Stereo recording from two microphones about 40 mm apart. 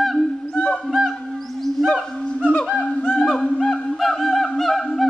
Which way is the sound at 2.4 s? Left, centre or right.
Left.